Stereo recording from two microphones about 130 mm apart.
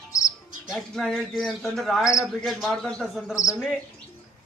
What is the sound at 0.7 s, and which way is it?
Speech, centre (ahead or behind).